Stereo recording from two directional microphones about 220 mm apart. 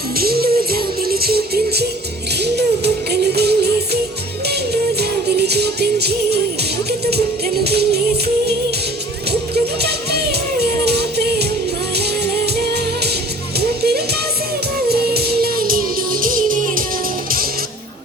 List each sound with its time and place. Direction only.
0.2 s music: 45° right (ahead or behind)
4.9 s music: 50° right (ahead or behind)
7.6 s music: 45° right (ahead or behind)
9.8 s music: 45° right (ahead or behind)
13.6 s music: 45° right (ahead or behind)